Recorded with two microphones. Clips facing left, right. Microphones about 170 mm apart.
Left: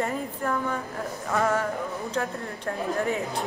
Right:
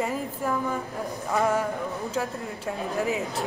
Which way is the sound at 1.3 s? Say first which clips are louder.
Right 1 dB; 15° right (ahead or behind).